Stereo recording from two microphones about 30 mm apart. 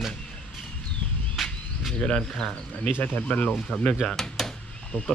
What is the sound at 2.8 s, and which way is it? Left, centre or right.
Speech, left.